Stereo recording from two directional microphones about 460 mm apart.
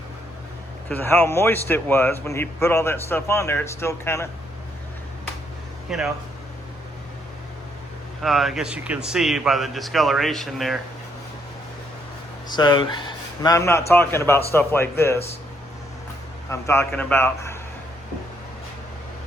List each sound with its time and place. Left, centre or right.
0.9 s a man's voice: centre
5.9 s a man's voice: centre
8.2 s a man's voice: centre
12.5 s a man's voice: centre
16.5 s a man's voice: centre